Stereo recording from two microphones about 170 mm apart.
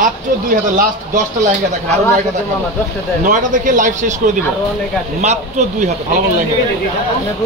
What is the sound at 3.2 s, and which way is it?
Speech, 50° right (ahead or behind).